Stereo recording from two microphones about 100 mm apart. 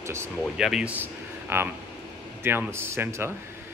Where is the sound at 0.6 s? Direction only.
5° right (ahead or behind).